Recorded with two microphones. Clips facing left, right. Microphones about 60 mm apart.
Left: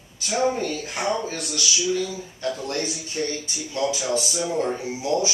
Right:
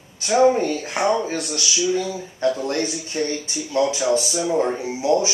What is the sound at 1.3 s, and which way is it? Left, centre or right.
Speech, right.